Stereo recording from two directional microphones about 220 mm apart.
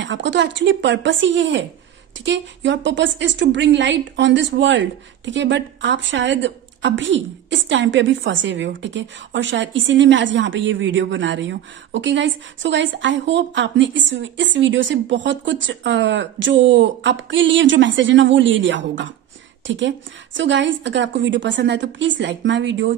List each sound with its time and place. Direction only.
0.0 s a woman's voice: 55° right (ahead or behind)